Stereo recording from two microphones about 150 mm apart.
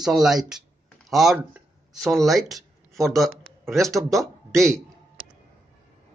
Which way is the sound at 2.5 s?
Centre (ahead or behind).